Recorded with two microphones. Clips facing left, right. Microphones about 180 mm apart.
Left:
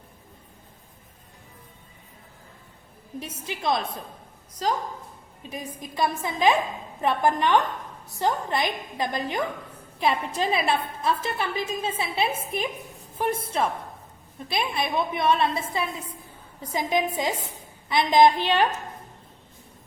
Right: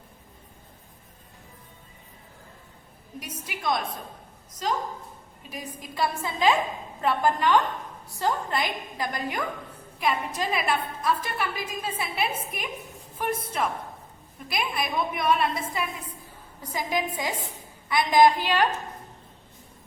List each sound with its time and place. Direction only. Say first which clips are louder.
3.2 s a woman's voice: left 4 dB; 25° left (ahead or behind)
5.5 s a woman's voice: left 3 dB; 20° left (ahead or behind)